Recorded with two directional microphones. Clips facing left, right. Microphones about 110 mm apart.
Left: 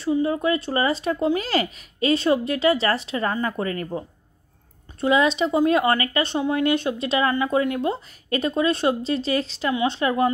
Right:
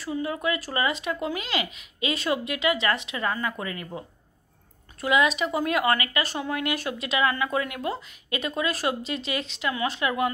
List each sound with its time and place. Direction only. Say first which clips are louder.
0.0 s speech: left 7 dB; 30° left (ahead or behind)
5.0 s speech: left 4 dB; 30° left (ahead or behind)